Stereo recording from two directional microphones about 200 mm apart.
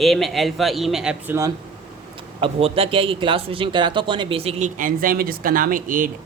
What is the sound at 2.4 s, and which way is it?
A man's voice, 30° right (ahead or behind).